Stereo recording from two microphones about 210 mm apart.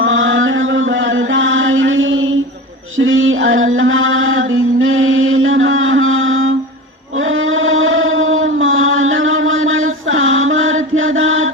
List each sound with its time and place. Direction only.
0.0 s chant: 65° right (ahead or behind)
3.0 s mantra: 70° right (ahead or behind)
7.2 s a sound: 70° right (ahead or behind)
10.9 s mantra: 70° right (ahead or behind)